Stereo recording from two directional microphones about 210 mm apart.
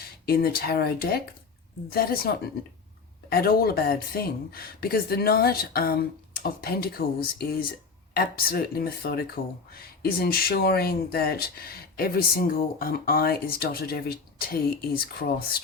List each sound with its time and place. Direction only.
0.0 s speech: 45° left (ahead or behind)